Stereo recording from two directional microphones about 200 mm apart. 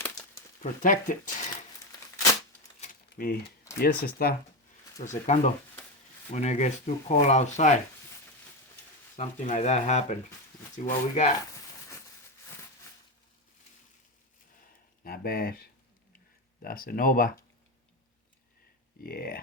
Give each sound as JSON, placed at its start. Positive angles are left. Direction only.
{"t": 0.6, "sound": "speech", "side_deg": 40}
{"t": 2.8, "sound": "typing", "side_deg": 45}
{"t": 3.8, "sound": "speech", "side_deg": 50}
{"t": 5.0, "sound": "speech", "side_deg": 35}
{"t": 9.1, "sound": "speech", "side_deg": 35}
{"t": 15.0, "sound": "speech", "side_deg": 50}
{"t": 19.0, "sound": "speech", "side_deg": 50}